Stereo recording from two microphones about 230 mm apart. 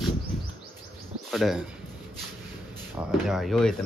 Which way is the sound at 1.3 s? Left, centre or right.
Centre.